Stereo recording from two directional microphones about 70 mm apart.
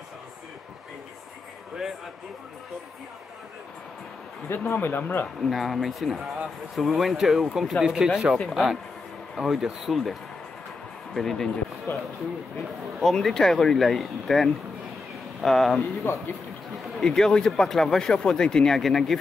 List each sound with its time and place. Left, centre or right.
4.5 s speech: left
5.4 s speech: centre
11.1 s speech: centre
11.9 s speech: left
13.0 s speech: centre
17.0 s speech: centre